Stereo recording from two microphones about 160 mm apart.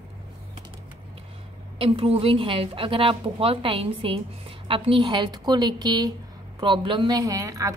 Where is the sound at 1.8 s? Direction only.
35° right (ahead or behind).